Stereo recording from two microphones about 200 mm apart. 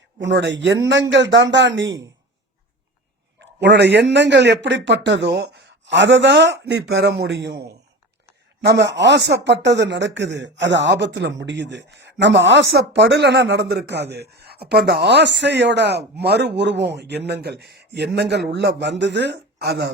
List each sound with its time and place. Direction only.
0.2 s speech: 65° right (ahead or behind)
3.4 s speech: 60° right (ahead or behind)